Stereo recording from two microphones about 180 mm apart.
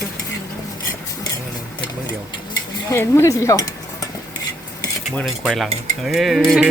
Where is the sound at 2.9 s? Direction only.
15° left (ahead or behind).